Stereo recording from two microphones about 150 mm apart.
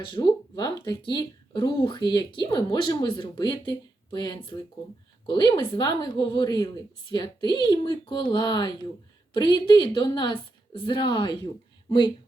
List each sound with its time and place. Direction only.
0.0 s a woman's voice: 30° left (ahead or behind)